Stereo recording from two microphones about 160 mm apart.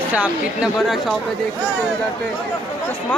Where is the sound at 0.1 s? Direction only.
5° right (ahead or behind).